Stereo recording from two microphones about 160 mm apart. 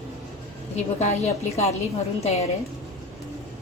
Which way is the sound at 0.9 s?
45° left (ahead or behind).